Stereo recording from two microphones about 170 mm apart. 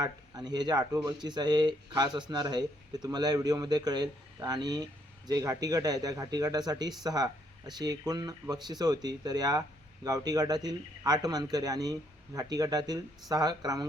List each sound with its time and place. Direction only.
0.0 s speech: 25° right (ahead or behind)